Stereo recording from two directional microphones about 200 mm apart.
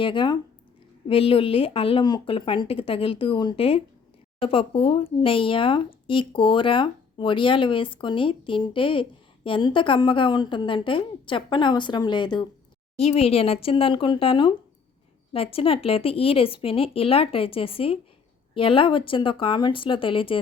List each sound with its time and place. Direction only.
0.0 s speech: 25° left (ahead or behind)